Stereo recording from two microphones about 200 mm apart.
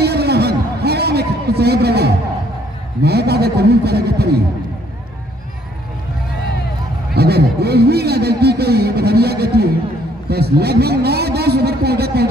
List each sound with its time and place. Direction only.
0.0 s a sound: 55° right (ahead or behind)
3.0 s a man's voice: 55° right (ahead or behind)
7.2 s a man's voice: 55° right (ahead or behind)